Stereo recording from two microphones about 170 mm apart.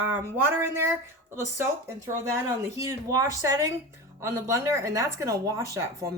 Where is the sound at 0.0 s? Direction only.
10° right (ahead or behind).